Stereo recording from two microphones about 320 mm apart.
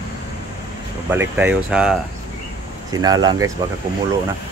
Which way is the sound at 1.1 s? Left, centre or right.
Centre.